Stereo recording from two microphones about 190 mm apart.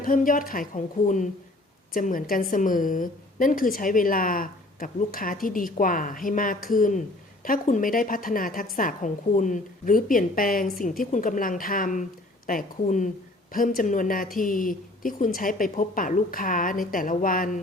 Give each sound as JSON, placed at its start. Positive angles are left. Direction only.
{"t": 0.0, "sound": "a woman's voice", "side_deg": 45}